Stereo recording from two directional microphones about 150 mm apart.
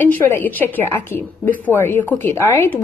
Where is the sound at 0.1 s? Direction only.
15° left (ahead or behind).